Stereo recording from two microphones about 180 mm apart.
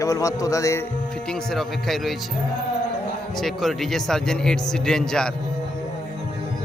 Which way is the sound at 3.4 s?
Centre (ahead or behind).